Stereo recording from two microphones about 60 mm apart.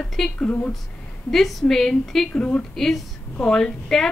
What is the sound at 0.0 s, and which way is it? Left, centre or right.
Speech, centre.